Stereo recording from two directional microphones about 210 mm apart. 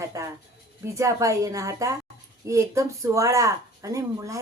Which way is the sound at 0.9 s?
15° right (ahead or behind).